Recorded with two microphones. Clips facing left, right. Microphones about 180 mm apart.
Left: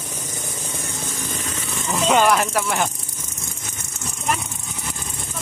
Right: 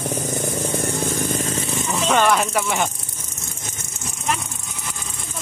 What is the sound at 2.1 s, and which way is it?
Speech, 10° left (ahead or behind).